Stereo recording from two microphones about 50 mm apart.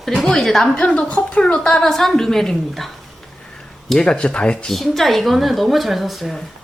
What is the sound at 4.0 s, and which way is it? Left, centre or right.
Speech, centre.